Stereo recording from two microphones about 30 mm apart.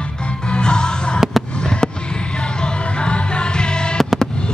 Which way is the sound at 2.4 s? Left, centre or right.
Left.